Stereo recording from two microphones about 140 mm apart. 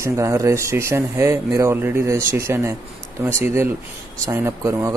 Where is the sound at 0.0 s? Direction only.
20° right (ahead or behind).